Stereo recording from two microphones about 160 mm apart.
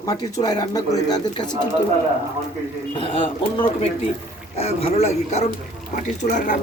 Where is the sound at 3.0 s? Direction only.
35° left (ahead or behind).